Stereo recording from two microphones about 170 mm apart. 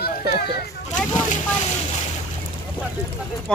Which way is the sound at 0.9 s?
45° left (ahead or behind).